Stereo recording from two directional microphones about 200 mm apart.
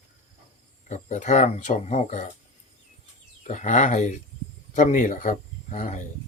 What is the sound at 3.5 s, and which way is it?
Speech, 35° left (ahead or behind).